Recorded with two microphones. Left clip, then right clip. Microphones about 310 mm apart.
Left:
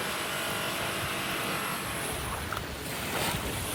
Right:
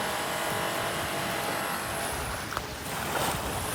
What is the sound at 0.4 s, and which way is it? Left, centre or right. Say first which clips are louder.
Vehicle: right 2 dB; right.